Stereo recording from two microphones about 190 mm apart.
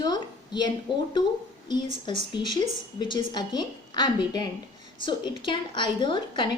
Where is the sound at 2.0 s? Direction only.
25° left (ahead or behind).